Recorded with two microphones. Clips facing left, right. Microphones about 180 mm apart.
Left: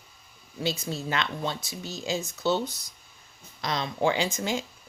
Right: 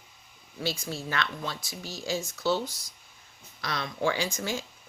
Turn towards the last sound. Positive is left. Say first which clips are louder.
# left 3 dB
turn(degrees=15)  # may be behind; listen again after turning